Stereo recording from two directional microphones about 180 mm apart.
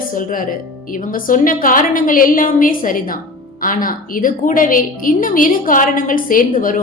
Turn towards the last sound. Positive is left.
turn(degrees=50)  # may be behind; listen again after turning